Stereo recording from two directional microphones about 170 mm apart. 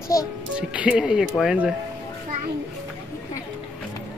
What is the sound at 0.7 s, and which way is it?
Speech, 5° right (ahead or behind).